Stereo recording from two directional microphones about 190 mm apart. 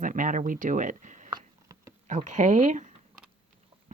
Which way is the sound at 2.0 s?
40° right (ahead or behind).